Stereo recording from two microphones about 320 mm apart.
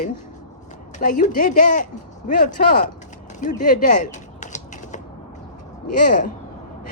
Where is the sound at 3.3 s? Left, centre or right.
Left.